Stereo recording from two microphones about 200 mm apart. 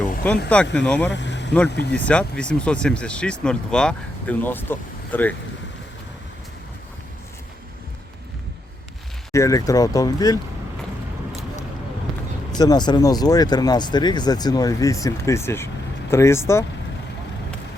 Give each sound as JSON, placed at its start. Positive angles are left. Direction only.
{"t": 0.5, "sound": "speech", "side_deg": 5}
{"t": 1.1, "sound": "vehicle", "side_deg": 60}
{"t": 1.9, "sound": "speech", "side_deg": 5}
{"t": 9.3, "sound": "speech", "side_deg": 15}
{"t": 12.1, "sound": "basketball bounce", "side_deg": 0}
{"t": 12.5, "sound": "speech", "side_deg": 20}